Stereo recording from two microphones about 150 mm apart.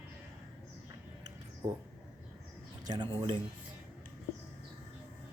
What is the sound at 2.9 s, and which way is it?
Speech, 30° right (ahead or behind).